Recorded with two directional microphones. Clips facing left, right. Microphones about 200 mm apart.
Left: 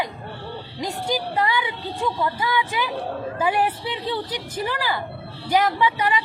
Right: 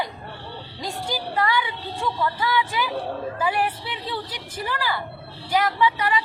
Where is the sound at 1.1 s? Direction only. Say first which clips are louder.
Left 1 dB; 20° left (ahead or behind).